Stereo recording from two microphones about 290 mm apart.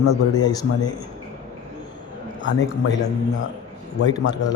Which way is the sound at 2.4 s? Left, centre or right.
Left.